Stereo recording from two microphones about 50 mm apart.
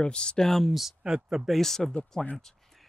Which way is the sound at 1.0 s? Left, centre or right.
Centre.